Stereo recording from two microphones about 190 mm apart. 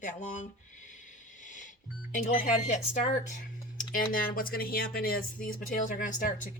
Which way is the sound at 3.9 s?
45° left (ahead or behind).